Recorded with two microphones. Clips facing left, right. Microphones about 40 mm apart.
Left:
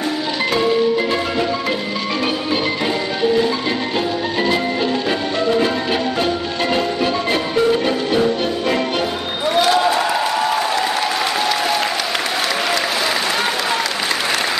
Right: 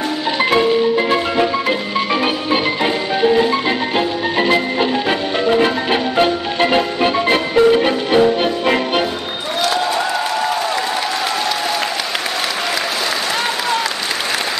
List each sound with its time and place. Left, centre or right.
0.4 s marimba: right
3.2 s music: right
6.1 s marimba: right
9.6 s a sound: centre